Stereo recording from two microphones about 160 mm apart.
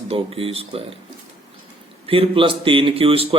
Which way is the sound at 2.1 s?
35° right (ahead or behind).